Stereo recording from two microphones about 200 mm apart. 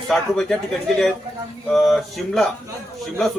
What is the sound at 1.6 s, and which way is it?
Speech, centre (ahead or behind).